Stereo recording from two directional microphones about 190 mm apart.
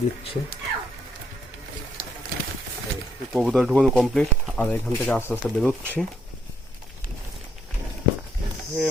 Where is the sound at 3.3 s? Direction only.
Centre (ahead or behind).